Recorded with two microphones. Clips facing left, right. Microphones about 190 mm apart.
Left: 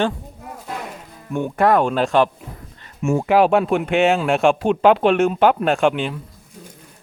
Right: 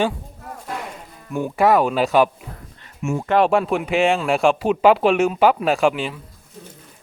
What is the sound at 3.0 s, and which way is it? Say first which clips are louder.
Speech: left 4 dB; 40° left (ahead or behind).